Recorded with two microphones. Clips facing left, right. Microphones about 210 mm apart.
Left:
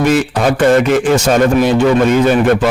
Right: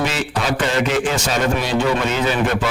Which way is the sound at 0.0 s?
50° left (ahead or behind).